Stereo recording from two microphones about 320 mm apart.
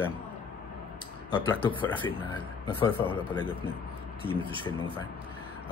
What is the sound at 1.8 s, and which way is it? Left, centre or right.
Speech, centre.